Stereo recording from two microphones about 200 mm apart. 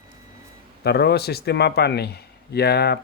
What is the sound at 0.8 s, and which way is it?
Speech, 55° left (ahead or behind).